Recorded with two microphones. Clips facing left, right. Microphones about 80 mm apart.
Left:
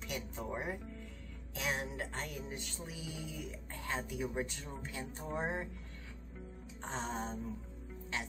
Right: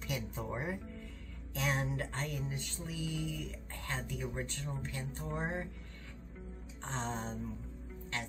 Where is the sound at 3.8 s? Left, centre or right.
Centre.